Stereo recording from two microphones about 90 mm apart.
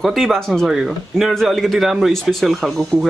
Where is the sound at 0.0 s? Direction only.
Centre (ahead or behind).